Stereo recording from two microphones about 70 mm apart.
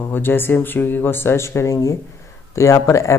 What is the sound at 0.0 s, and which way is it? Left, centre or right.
Speech, left.